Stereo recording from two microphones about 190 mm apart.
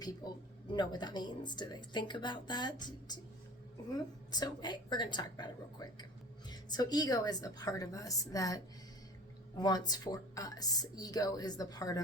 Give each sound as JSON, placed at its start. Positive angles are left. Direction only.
{"t": 0.2, "sound": "a woman's voice", "side_deg": 20}